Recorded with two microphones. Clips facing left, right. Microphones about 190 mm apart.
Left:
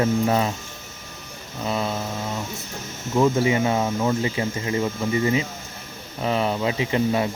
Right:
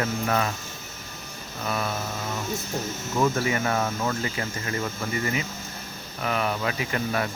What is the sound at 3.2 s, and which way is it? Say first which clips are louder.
Speech: left 5 dB; 15° left (ahead or behind).